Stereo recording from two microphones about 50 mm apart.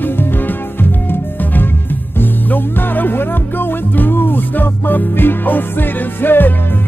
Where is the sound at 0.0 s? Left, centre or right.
Left.